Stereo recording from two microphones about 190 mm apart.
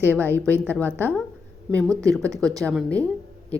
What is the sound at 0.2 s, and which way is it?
Speech, 10° left (ahead or behind).